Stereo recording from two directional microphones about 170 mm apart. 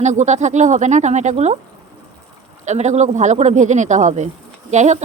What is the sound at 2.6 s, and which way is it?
A woman's voice, 45° right (ahead or behind).